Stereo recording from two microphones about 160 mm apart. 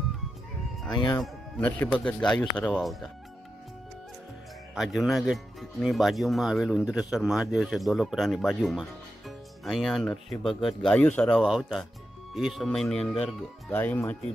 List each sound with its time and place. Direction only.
0.9 s speech: 25° left (ahead or behind)
1.2 s speech: 10° left (ahead or behind)
4.7 s speech: centre (ahead or behind)
10.5 s speech: 30° left (ahead or behind)
10.8 s speech: 5° left (ahead or behind)